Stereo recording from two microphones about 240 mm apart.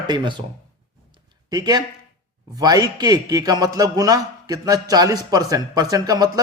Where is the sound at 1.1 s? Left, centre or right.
Centre.